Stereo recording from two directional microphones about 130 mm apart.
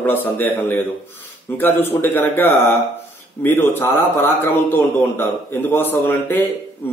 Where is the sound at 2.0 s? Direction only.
15° left (ahead or behind).